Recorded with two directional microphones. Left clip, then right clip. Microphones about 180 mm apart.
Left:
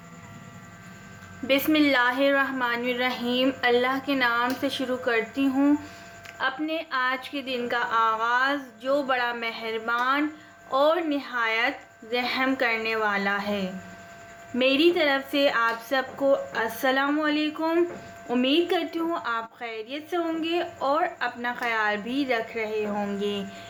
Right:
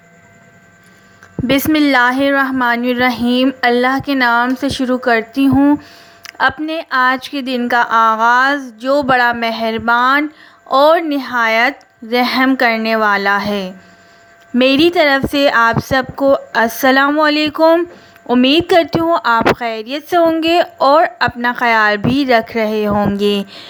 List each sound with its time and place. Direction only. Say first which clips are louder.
1.5 s a woman's voice: right 9 dB; 50° right (ahead or behind)